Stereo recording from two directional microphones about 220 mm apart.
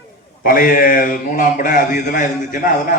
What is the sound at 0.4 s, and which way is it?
A man's voice, 40° left (ahead or behind).